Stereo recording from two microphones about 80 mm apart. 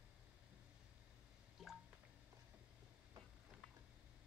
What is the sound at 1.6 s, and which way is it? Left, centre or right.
Drip, centre.